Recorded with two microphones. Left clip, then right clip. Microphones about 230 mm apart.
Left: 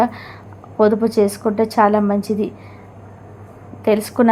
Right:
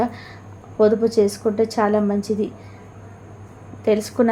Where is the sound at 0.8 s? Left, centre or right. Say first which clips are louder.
Left 1 dB; centre.